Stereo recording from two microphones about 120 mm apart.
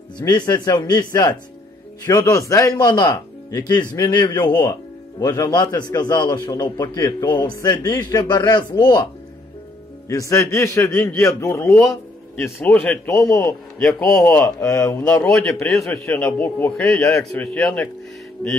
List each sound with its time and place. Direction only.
0.2 s a man's voice: 25° left (ahead or behind)
10.0 s a man's voice: 25° left (ahead or behind)
12.6 s a man's voice: 10° left (ahead or behind)
13.2 s a man's voice: 25° left (ahead or behind)
13.7 s a man's voice: 5° left (ahead or behind)
14.6 s a man's voice: 25° left (ahead or behind)
15.0 s a man's voice: 10° left (ahead or behind)
16.8 s a man's voice: 5° left (ahead or behind)